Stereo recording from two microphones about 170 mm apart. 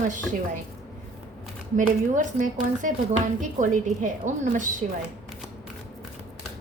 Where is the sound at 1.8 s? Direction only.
50° right (ahead or behind).